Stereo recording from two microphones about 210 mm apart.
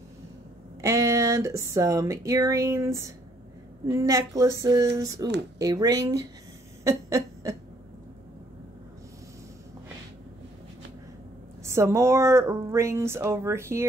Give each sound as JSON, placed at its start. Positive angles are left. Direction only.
{"t": 0.7, "sound": "speech", "side_deg": -15}
{"t": 6.8, "sound": "a sound", "side_deg": -15}
{"t": 11.6, "sound": "speech", "side_deg": -15}